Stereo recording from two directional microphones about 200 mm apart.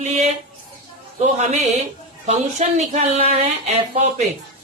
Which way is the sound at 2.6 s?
35° right (ahead or behind).